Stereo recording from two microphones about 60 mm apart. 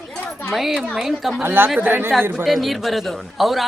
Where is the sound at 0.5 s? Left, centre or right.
Centre.